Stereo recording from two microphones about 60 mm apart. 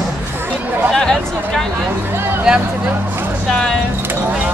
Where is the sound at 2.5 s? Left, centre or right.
Centre.